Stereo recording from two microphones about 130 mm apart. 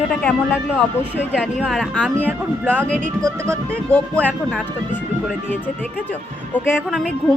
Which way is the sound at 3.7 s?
10° left (ahead or behind).